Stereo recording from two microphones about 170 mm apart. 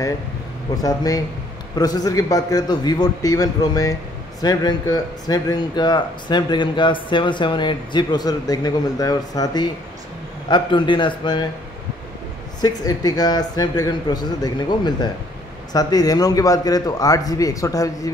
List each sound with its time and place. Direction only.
0.8 s speech: 20° left (ahead or behind)
12.5 s speech: 25° left (ahead or behind)